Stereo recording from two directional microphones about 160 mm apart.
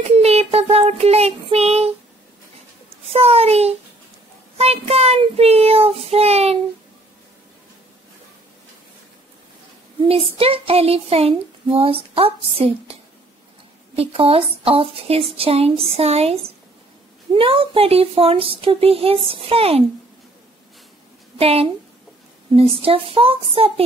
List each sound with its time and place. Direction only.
0.1 s child singing: 40° right (ahead or behind)
3.1 s speech: 40° right (ahead or behind)
10.0 s speech: 35° right (ahead or behind)
13.9 s speech: 35° right (ahead or behind)
21.4 s a woman's voice: 40° right (ahead or behind)